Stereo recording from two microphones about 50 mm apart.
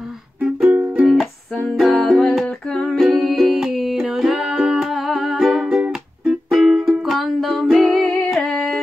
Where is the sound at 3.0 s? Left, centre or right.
Centre.